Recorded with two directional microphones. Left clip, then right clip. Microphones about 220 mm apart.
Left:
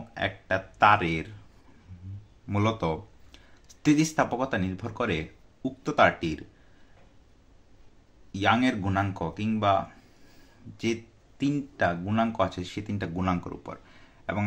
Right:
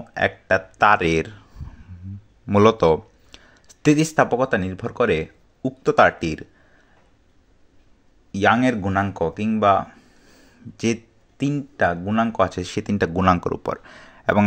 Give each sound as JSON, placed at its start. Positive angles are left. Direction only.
{"t": 0.1, "sound": "speech", "side_deg": -35}
{"t": 2.4, "sound": "speech", "side_deg": -35}
{"t": 8.3, "sound": "speech", "side_deg": -35}